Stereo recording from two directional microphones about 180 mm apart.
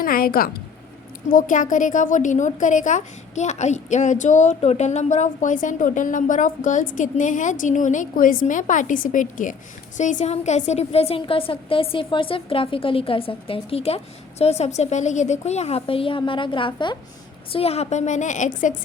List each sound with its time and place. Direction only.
0.0 s a woman's voice: 55° left (ahead or behind)